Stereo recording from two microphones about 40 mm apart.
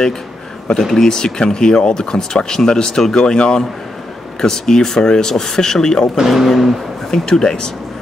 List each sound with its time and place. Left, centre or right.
0.7 s speech: centre
1.0 s speech: centre
6.1 s speech: centre
7.1 s speech: centre